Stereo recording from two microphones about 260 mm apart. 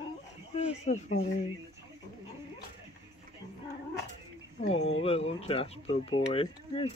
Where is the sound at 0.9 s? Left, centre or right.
Left.